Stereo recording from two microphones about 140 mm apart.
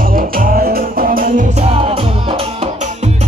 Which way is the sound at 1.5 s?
45° right (ahead or behind).